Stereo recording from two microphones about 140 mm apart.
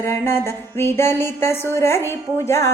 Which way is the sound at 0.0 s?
20° left (ahead or behind).